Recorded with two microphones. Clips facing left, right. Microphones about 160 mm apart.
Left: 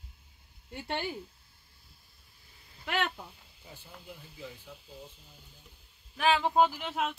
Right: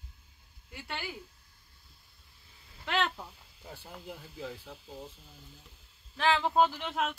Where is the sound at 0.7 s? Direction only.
40° left (ahead or behind).